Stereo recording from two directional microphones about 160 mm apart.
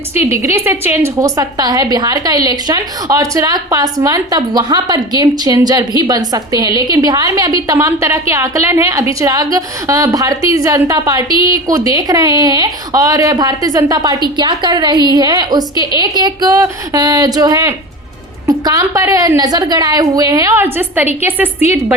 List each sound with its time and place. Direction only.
0.1 s a woman's voice: 15° right (ahead or behind)